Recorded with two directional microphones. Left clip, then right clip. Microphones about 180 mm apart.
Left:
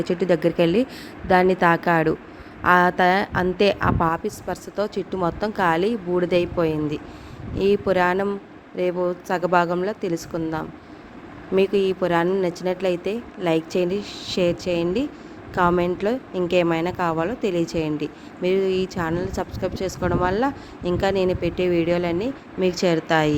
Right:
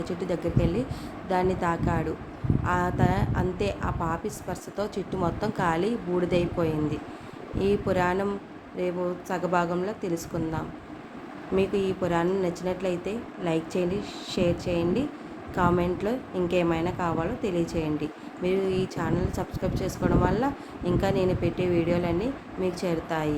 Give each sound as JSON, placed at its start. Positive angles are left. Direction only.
{"t": 0.0, "sound": "a woman's voice", "side_deg": 35}